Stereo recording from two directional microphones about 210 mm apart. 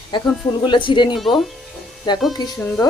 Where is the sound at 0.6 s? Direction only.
20° left (ahead or behind).